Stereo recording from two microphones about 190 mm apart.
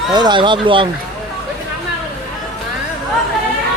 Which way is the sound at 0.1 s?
20° right (ahead or behind).